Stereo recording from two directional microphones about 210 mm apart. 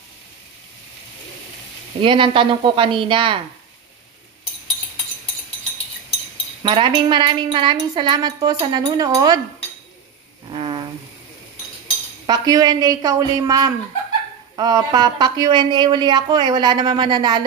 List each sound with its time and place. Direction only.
2.0 s speech: 25° right (ahead or behind)
6.6 s speech: 25° right (ahead or behind)
10.5 s vehicle: 25° right (ahead or behind)
12.3 s speech: 20° right (ahead or behind)